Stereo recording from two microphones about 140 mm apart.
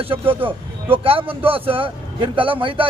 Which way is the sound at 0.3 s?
15° right (ahead or behind).